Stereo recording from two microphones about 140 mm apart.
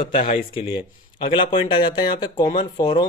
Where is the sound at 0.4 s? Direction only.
40° left (ahead or behind).